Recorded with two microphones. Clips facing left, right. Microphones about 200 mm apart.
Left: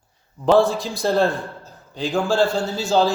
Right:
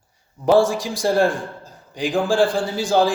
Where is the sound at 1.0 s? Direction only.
10° right (ahead or behind).